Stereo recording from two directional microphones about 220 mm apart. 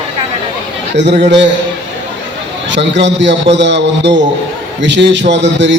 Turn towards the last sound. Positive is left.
turn(degrees=-55)  # may be behind; listen again after turning